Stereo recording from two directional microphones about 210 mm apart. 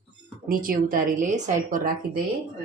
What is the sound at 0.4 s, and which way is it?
A woman's voice, 45° right (ahead or behind).